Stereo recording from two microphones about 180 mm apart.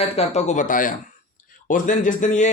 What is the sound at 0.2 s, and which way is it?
Speech, 40° left (ahead or behind).